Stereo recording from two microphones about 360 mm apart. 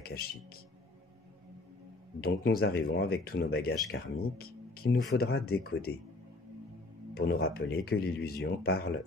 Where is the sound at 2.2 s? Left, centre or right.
Left.